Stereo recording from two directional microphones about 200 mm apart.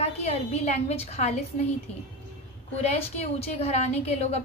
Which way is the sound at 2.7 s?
30° left (ahead or behind).